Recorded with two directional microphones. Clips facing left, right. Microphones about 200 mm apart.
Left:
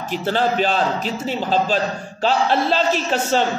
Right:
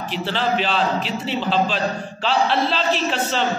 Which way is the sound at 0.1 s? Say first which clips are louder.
Left 3 dB; 45° left (ahead or behind).